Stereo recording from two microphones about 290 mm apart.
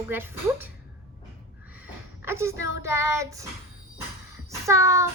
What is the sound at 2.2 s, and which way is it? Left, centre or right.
Speech, centre.